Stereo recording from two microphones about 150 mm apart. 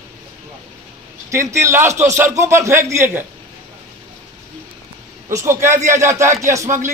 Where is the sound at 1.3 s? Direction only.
20° right (ahead or behind).